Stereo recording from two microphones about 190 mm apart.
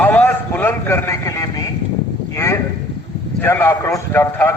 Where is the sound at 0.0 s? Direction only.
10° left (ahead or behind).